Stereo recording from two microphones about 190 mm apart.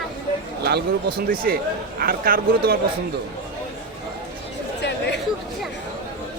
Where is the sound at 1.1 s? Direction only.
50° right (ahead or behind).